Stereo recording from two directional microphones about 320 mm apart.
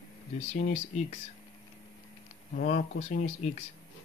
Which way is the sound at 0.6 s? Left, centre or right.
Left.